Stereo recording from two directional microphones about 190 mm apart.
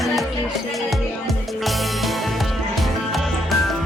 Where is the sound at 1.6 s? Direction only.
Centre (ahead or behind).